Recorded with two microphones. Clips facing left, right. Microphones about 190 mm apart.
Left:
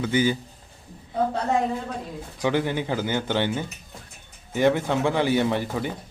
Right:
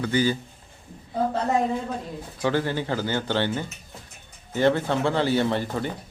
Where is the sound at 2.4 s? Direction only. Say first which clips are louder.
Left 1 dB; 15° left (ahead or behind).